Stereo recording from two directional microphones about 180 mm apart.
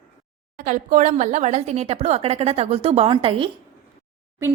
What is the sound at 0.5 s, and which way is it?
Speech, 45° right (ahead or behind).